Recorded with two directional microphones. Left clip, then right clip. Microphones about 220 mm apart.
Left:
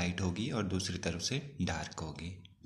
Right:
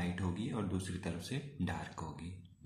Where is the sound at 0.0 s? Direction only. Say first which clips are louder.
Left 4 dB; 35° left (ahead or behind).